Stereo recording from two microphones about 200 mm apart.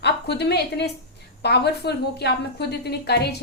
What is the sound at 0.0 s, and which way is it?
A woman's voice, 55° left (ahead or behind).